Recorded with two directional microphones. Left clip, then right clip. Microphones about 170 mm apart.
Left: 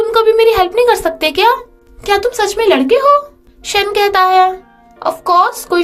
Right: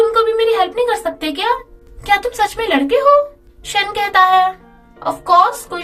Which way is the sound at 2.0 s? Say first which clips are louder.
Left 2 dB; 35° left (ahead or behind).